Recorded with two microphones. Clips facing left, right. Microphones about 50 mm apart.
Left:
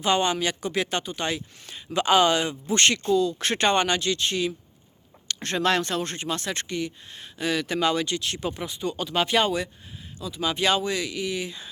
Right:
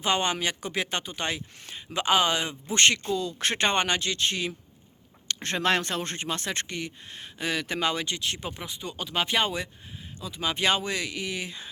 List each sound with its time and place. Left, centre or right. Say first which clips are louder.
0.0 s speech: left 3 dB; right
2.0 s speech: left 4 dB; centre
10.2 s speech: left 2 dB; right